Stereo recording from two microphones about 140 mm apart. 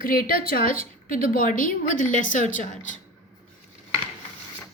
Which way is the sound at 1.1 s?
80° left.